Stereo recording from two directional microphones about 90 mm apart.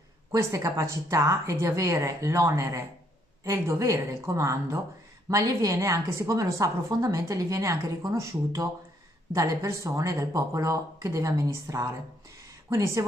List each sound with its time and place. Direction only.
0.3 s a woman's voice: 35° right (ahead or behind)